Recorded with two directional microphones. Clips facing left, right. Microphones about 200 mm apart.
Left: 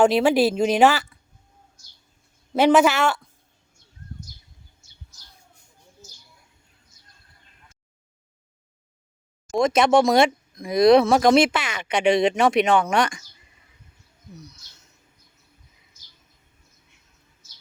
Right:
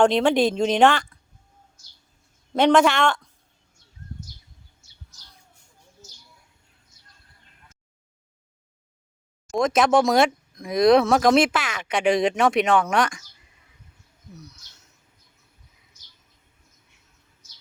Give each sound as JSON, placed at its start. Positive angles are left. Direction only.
{"t": 0.0, "sound": "speech", "side_deg": 5}
{"t": 2.6, "sound": "speech", "side_deg": 5}
{"t": 9.5, "sound": "speech", "side_deg": 0}
{"t": 14.3, "sound": "speech", "side_deg": -5}